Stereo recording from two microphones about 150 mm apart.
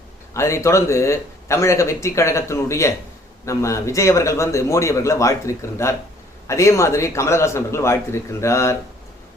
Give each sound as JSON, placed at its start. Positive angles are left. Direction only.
{"t": 0.3, "sound": "speech", "side_deg": 20}